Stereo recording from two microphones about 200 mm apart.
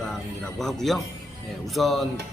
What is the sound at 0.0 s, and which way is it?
Speech, centre (ahead or behind).